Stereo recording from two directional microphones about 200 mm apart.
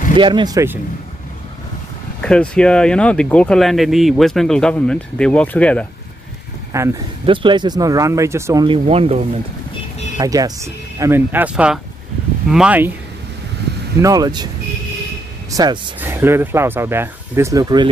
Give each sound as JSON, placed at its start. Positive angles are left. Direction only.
{"t": 0.1, "sound": "speech", "side_deg": -25}
{"t": 2.5, "sound": "speech", "side_deg": 5}
{"t": 6.7, "sound": "speech", "side_deg": -15}
{"t": 8.6, "sound": "speech", "side_deg": -30}
{"t": 10.1, "sound": "speech", "side_deg": -20}
{"t": 14.0, "sound": "speech", "side_deg": -20}
{"t": 15.5, "sound": "speech", "side_deg": -20}